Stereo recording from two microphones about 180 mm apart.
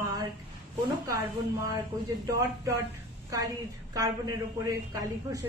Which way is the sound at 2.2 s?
20° right (ahead or behind).